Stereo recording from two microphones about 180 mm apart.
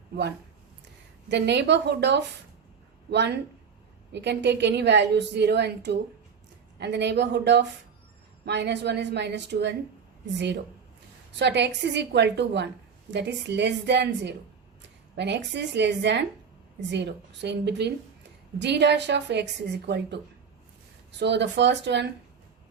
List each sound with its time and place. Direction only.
1.3 s a woman's voice: 70° right (ahead or behind)
11.3 s a woman's voice: 70° right (ahead or behind)
21.2 s a woman's voice: 70° right (ahead or behind)